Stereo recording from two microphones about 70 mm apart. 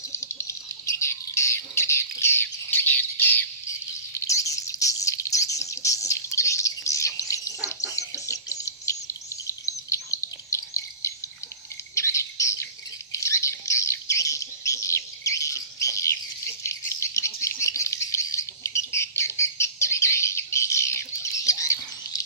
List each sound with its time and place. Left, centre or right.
0.1 s a sound: left
4.1 s bird: left
11.9 s squawk: left
16.6 s bird: left